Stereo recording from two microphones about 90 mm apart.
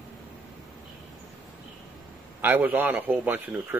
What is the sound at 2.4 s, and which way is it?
A man's voice, 20° right (ahead or behind).